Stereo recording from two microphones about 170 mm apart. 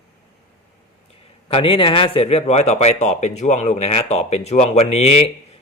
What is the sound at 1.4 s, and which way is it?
A man's voice, 35° left (ahead or behind).